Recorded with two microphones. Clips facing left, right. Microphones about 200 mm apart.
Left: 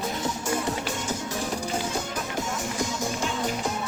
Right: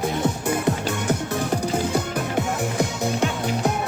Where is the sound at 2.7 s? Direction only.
60° right (ahead or behind).